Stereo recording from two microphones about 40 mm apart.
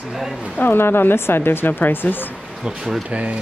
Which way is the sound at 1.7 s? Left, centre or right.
Left.